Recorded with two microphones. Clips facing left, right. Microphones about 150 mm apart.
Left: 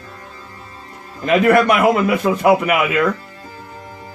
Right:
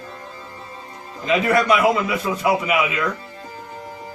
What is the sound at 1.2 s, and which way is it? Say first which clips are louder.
Speech: left 5 dB; 60° left (ahead or behind).